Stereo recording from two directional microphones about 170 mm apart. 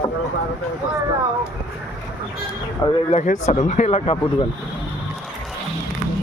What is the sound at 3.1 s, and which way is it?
Speech, 40° left (ahead or behind).